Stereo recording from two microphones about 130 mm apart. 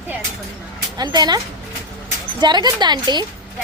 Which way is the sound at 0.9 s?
30° right (ahead or behind).